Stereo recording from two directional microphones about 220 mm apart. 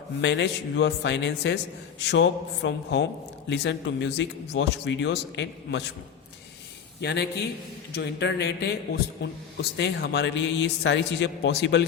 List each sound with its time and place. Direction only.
0.2 s a man's voice: 55° left (ahead or behind)
7.0 s a man's voice: 50° left (ahead or behind)